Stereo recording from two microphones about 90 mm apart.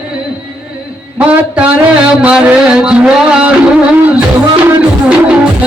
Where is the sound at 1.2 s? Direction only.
15° right (ahead or behind).